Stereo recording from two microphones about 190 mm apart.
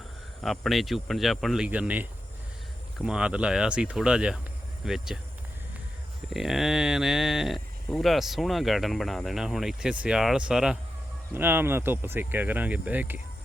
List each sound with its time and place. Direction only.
0.4 s speech: centre (ahead or behind)
6.3 s speech: centre (ahead or behind)